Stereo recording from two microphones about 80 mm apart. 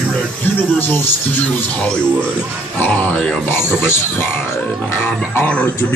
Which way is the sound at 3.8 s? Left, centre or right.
Left.